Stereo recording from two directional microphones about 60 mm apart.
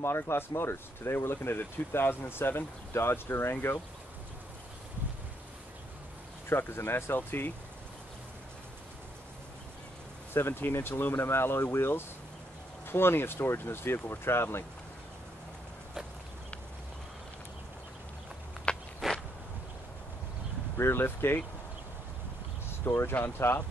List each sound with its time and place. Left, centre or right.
0.0 s speech: left
6.5 s speech: left
10.3 s speech: left
18.7 s walk: centre
20.7 s speech: left
22.7 s boat: left
23.1 s speech: left